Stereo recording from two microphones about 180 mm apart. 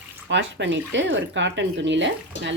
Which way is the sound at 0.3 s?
75° right (ahead or behind).